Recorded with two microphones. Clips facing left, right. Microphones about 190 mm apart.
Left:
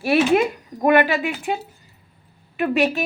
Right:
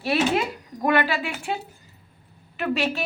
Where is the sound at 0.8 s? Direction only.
15° left (ahead or behind).